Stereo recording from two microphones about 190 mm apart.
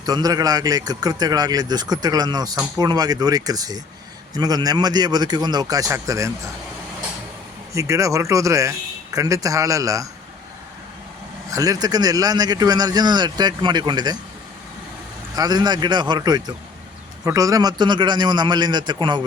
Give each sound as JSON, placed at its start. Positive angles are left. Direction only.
{"t": 0.0, "sound": "speech", "side_deg": -20}
{"t": 7.7, "sound": "speech", "side_deg": -15}
{"t": 11.5, "sound": "speech", "side_deg": -20}
{"t": 15.4, "sound": "speech", "side_deg": -20}